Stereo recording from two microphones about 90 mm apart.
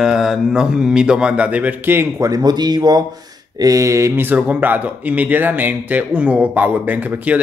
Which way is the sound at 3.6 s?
40° right (ahead or behind).